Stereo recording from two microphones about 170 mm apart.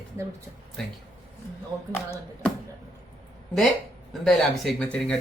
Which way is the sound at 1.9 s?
15° left (ahead or behind).